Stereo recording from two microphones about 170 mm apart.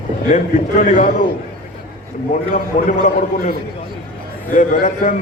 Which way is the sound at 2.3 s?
50° left (ahead or behind).